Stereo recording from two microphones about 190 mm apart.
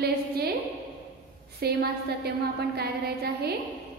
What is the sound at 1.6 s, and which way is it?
A woman's voice, 55° right (ahead or behind).